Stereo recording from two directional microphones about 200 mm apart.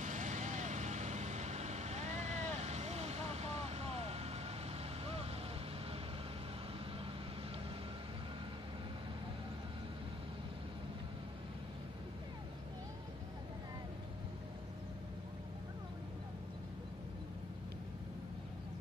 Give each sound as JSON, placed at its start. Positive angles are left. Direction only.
{"t": 0.0, "sound": "vehicle", "side_deg": -35}